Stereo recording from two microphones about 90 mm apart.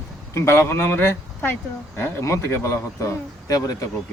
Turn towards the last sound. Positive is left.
turn(degrees=45)  # may be behind; listen again after turning